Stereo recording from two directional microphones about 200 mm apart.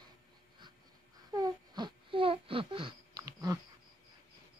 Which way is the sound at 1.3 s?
20° right (ahead or behind).